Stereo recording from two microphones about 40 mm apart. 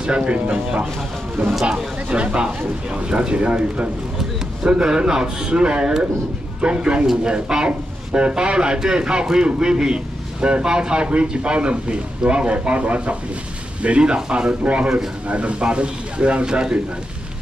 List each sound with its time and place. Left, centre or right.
0.0 s a man's voice: right
2.0 s a man's voice: right